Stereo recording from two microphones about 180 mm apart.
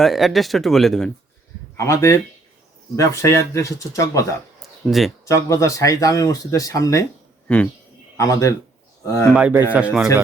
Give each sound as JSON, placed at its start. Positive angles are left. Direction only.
{"t": 0.0, "sound": "speech", "side_deg": 0}
{"t": 1.7, "sound": "speech", "side_deg": 15}
{"t": 4.9, "sound": "speech", "side_deg": 0}
{"t": 5.2, "sound": "speech", "side_deg": 15}
{"t": 7.4, "sound": "speech", "side_deg": 5}
{"t": 8.1, "sound": "a man's voice", "side_deg": 15}
{"t": 9.3, "sound": "speech", "side_deg": -10}